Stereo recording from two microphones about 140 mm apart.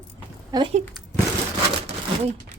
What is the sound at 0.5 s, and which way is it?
Speech, 25° right (ahead or behind).